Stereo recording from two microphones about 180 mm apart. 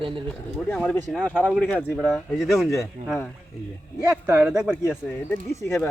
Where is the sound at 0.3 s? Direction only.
5° left (ahead or behind).